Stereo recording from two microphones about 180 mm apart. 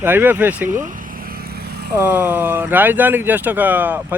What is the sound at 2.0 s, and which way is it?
Speech, 10° right (ahead or behind).